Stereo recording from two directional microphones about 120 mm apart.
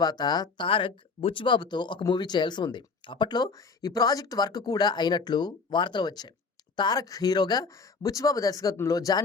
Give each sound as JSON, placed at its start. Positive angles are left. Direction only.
{"t": 0.0, "sound": "speech", "side_deg": 35}